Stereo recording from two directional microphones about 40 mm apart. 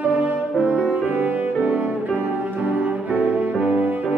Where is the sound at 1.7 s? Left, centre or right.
Right.